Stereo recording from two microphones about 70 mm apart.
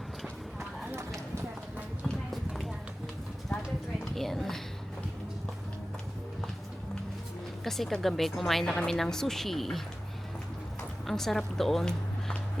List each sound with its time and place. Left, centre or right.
2.3 s clip-clop: centre
4.1 s a sound: centre
7.6 s speech: centre
11.0 s speech: centre